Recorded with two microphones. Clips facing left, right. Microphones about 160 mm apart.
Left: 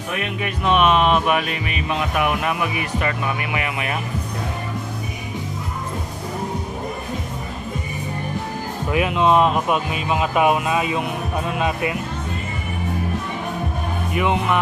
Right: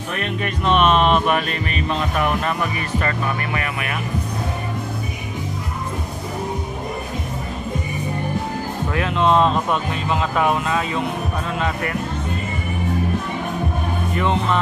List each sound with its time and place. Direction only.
0.1 s speech: 10° left (ahead or behind)
8.9 s speech: 10° left (ahead or behind)
14.1 s speech: 10° left (ahead or behind)